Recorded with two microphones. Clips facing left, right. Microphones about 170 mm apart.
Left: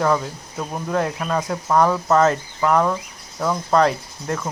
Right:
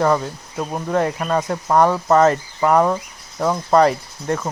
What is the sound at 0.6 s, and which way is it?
Speech, 15° right (ahead or behind).